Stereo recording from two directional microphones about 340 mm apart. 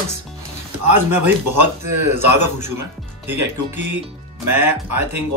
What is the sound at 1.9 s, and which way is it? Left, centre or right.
Speech, left.